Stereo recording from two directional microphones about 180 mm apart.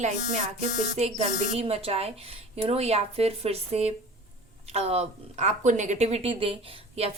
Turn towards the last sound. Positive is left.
turn(degrees=-35)  # may be behind; listen again after turning